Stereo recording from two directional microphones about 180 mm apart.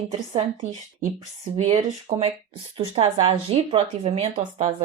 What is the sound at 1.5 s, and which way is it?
Speech, 40° right (ahead or behind).